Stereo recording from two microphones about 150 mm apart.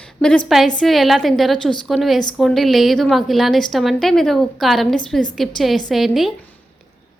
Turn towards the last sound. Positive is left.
turn(degrees=0)  # may be behind; listen again after turning